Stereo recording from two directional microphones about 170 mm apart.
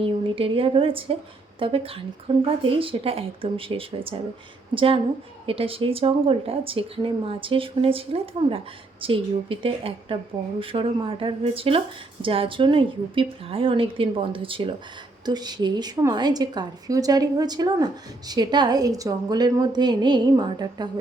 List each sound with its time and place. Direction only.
0.0 s a woman's voice: 30° right (ahead or behind)